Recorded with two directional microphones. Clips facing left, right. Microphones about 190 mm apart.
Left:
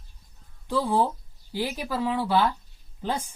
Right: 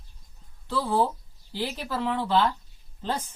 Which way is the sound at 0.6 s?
15° left (ahead or behind).